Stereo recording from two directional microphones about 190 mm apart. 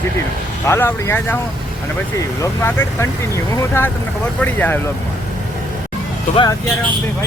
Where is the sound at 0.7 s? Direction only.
15° left (ahead or behind).